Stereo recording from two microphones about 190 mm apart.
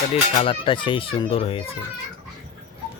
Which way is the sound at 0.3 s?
30° left (ahead or behind).